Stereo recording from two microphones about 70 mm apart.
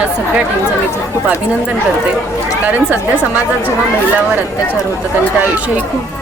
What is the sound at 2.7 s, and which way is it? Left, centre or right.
Speech, right.